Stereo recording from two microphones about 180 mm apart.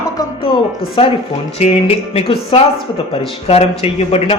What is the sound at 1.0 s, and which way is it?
Speech, 30° left (ahead or behind).